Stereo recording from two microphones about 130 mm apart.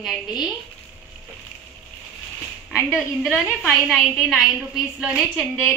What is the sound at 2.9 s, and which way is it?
A woman's voice, 5° right (ahead or behind).